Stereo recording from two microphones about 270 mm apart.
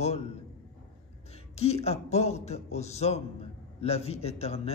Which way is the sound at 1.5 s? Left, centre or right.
Left.